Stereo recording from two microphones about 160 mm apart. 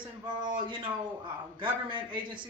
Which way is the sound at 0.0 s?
25° right (ahead or behind).